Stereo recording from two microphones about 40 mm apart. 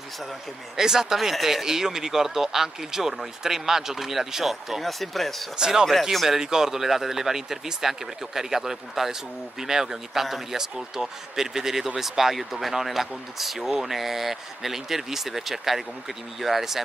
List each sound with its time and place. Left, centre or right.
0.7 s speech: centre
5.6 s speech: centre